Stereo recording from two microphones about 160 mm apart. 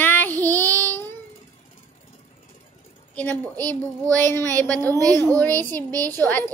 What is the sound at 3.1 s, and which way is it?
A woman's voice, 10° left (ahead or behind).